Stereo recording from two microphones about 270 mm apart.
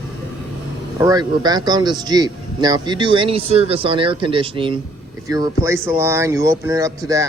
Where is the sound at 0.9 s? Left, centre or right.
Centre.